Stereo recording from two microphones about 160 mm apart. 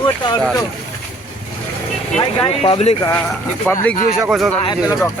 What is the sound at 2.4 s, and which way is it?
Speech, 35° left (ahead or behind).